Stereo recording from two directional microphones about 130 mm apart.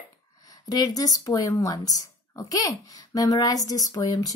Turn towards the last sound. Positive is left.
turn(degrees=25)  # may be behind; listen again after turning